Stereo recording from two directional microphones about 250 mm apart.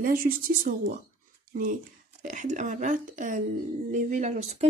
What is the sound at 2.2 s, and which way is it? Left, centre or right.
Speech, right.